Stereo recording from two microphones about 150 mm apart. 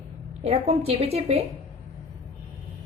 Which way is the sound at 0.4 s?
45° right (ahead or behind).